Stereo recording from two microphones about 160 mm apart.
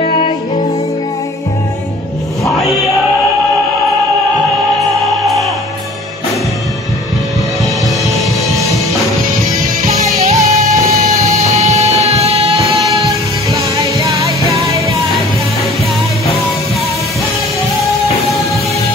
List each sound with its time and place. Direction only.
0.0 s music: 35° left (ahead or behind)
10.1 s music: 45° right (ahead or behind)
11.5 s music: 45° right (ahead or behind)